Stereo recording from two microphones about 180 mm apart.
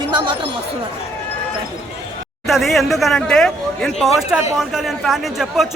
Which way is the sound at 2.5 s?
Centre (ahead or behind).